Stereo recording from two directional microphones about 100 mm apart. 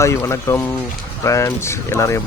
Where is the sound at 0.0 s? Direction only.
30° left (ahead or behind).